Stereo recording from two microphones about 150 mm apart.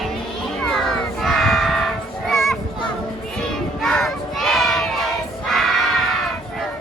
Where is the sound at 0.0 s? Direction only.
Centre (ahead or behind).